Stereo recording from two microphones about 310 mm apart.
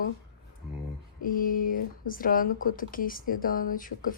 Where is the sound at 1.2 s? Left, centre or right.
Left.